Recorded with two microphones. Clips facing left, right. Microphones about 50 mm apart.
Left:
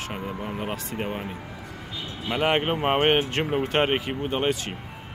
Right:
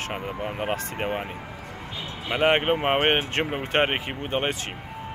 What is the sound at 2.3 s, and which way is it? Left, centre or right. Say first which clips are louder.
Speech: right 2 dB; right.